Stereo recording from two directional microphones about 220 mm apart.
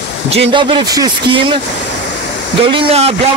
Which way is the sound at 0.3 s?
25° right (ahead or behind).